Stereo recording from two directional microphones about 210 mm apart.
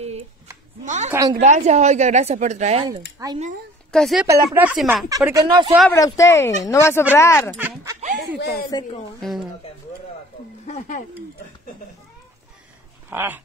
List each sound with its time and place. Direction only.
0.8 s a woman's voice: 35° right (ahead or behind)
2.9 s speech: 15° right (ahead or behind)
3.9 s speech: centre (ahead or behind)
5.1 s speech: 15° right (ahead or behind)
5.9 s speech: 15° left (ahead or behind)
7.5 s speech: 10° right (ahead or behind)
8.7 s a woman's voice: 20° left (ahead or behind)
9.2 s speech: centre (ahead or behind)
13.1 s speech: 10° right (ahead or behind)